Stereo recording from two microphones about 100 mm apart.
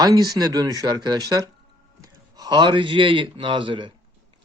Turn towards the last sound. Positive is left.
turn(degrees=-55)  # may be behind; listen again after turning